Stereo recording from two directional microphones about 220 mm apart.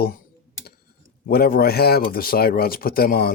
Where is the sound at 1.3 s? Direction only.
45° left (ahead or behind).